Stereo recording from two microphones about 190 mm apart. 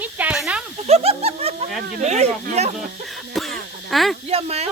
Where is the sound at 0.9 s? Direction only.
35° right (ahead or behind).